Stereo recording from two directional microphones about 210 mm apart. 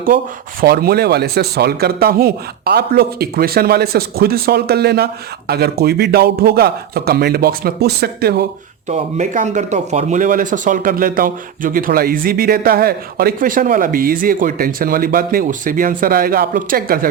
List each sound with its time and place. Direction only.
0.6 s a man's voice: 45° right (ahead or behind)
8.9 s speech: 35° right (ahead or behind)